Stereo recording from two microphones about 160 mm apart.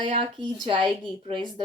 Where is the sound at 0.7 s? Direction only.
30° right (ahead or behind).